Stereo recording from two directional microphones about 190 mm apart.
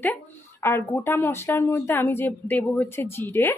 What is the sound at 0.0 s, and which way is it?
Speech, 10° left (ahead or behind).